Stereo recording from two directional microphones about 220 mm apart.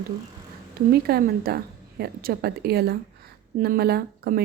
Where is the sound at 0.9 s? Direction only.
45° right (ahead or behind).